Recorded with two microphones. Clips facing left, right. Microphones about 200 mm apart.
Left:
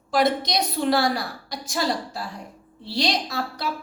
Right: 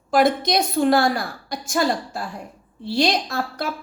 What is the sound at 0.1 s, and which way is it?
A woman's voice, 50° right (ahead or behind).